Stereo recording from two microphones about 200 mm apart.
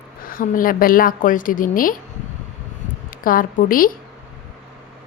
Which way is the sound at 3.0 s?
45° left (ahead or behind).